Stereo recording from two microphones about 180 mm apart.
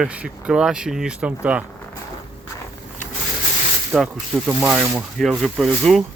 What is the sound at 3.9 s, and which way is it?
Speech, 5° right (ahead or behind).